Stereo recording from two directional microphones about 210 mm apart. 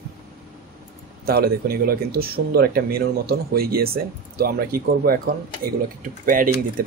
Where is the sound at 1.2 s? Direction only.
45° right (ahead or behind).